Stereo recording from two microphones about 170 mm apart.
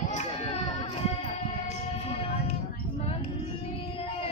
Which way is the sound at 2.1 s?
35° left (ahead or behind).